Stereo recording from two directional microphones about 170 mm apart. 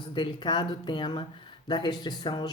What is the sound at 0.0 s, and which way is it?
Speech, 25° left (ahead or behind).